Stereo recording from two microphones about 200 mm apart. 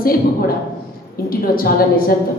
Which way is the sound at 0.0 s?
45° left (ahead or behind).